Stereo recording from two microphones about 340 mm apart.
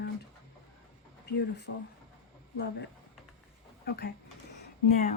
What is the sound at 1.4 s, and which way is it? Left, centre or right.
Speech, left.